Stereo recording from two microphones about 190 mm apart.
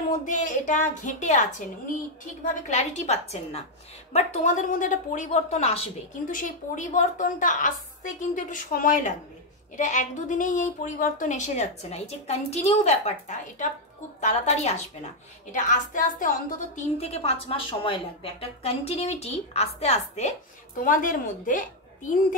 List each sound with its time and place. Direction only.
0.2 s a woman's voice: 40° left (ahead or behind)
2.7 s a woman's voice: 40° left (ahead or behind)